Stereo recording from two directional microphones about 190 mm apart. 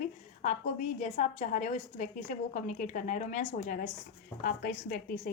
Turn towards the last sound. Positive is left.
turn(degrees=50)  # may be behind; listen again after turning